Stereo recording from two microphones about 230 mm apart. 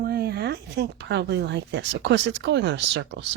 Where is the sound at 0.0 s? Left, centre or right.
Right.